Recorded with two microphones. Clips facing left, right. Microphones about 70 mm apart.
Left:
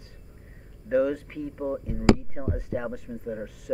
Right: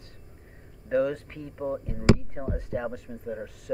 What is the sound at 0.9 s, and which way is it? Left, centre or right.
Speech, centre.